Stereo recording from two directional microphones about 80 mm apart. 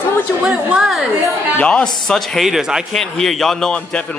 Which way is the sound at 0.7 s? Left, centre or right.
Centre.